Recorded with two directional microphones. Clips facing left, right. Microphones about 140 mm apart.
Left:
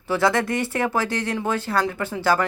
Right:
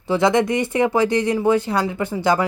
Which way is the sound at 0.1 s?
20° right (ahead or behind).